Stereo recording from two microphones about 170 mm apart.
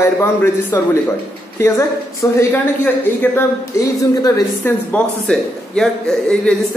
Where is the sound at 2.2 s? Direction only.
15° left (ahead or behind).